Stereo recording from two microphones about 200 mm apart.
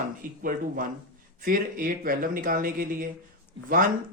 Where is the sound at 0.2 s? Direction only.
45° right (ahead or behind).